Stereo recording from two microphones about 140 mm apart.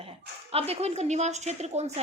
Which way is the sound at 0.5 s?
45° right (ahead or behind).